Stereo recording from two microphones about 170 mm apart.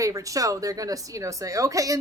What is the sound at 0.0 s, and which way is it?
A woman's voice, 20° right (ahead or behind).